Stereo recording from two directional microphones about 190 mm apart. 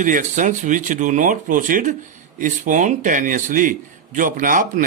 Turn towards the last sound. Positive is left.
turn(degrees=-45)  # may be behind; listen again after turning